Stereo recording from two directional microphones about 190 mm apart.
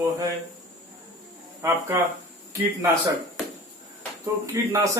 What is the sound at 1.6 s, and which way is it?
Speech, 15° right (ahead or behind).